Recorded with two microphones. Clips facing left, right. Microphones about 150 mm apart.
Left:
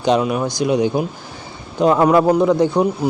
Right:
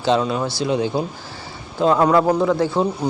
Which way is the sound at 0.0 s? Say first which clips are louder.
Left 2 dB; 15° left (ahead or behind).